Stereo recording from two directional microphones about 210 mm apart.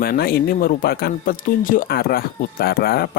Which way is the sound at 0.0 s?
45° left (ahead or behind).